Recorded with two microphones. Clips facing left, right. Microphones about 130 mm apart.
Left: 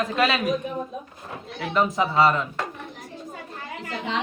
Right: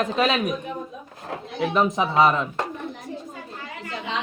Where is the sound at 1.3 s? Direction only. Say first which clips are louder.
Right 5 dB; 80° right.